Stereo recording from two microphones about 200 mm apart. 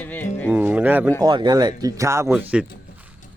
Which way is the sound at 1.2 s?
20° right (ahead or behind).